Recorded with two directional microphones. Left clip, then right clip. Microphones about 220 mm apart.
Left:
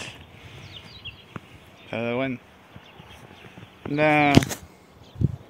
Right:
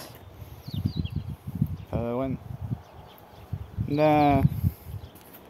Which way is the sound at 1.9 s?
5° right (ahead or behind).